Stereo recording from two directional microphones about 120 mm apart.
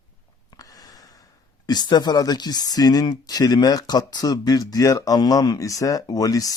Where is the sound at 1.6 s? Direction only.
35° left (ahead or behind).